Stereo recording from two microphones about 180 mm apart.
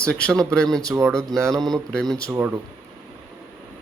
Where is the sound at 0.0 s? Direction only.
5° left (ahead or behind).